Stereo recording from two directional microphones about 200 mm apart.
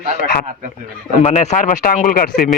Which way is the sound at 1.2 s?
35° left (ahead or behind).